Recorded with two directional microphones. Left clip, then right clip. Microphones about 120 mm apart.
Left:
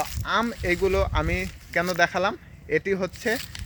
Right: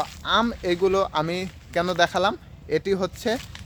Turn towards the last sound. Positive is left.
turn(degrees=-20)  # may be behind; listen again after turning